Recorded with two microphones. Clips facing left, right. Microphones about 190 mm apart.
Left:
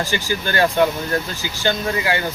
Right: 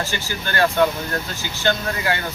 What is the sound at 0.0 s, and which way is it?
Speech, 15° left (ahead or behind).